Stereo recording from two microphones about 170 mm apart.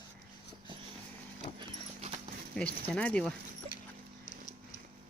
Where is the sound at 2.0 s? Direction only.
40° right (ahead or behind).